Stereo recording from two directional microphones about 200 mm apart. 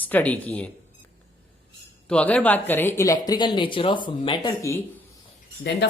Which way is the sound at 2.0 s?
5° left (ahead or behind).